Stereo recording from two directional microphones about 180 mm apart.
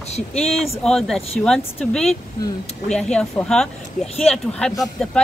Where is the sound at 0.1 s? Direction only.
35° left (ahead or behind).